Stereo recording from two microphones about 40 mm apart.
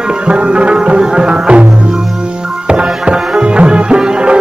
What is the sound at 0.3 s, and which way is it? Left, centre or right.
Music, right.